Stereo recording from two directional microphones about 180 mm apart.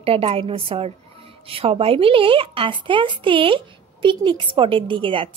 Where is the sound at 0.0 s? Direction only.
30° right (ahead or behind).